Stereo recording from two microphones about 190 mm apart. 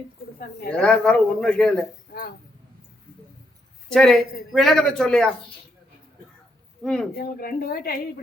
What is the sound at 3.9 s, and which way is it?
Speech, centre (ahead or behind).